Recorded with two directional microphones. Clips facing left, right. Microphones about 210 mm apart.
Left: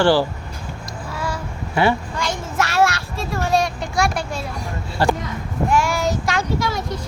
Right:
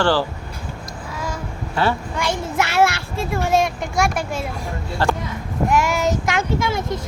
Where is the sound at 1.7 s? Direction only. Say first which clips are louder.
Left 3 dB; 15° left (ahead or behind).